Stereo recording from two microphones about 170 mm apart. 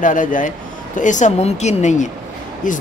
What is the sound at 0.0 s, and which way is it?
Speech, 50° left (ahead or behind).